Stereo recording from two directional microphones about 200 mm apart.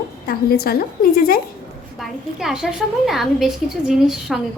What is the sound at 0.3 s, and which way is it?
A woman's voice, 50° left (ahead or behind).